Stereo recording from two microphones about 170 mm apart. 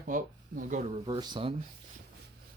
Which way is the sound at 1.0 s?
25° right (ahead or behind).